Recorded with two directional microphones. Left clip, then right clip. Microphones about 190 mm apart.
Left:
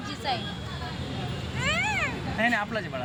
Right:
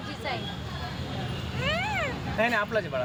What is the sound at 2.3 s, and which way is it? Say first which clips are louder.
Speech: right 1 dB; 35° right (ahead or behind).